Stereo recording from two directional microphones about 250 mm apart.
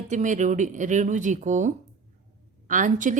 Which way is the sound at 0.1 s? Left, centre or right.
Right.